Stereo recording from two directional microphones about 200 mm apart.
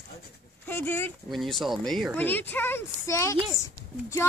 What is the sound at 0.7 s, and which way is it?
Speech, 10° left (ahead or behind).